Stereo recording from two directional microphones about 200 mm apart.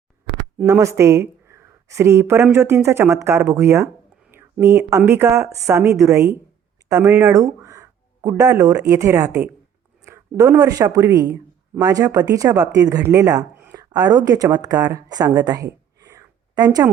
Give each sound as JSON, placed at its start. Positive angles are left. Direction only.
{"t": 0.6, "sound": "speech", "side_deg": -15}